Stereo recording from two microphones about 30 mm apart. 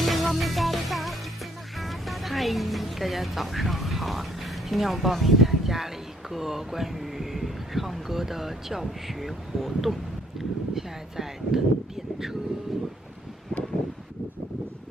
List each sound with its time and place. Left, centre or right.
0.0 s music: centre
8.8 s speech: centre
12.7 s speech: centre